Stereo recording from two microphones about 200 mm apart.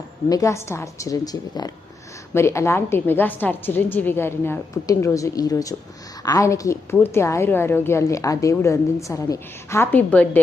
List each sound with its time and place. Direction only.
0.3 s a woman's voice: 15° left (ahead or behind)